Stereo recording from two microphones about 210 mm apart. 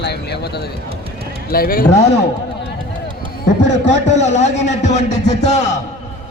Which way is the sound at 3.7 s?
35° left (ahead or behind).